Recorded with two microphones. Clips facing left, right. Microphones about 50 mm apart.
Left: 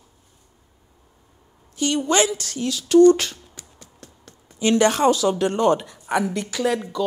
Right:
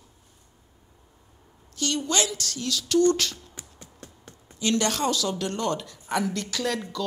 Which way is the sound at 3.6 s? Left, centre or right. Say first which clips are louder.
Even; centre.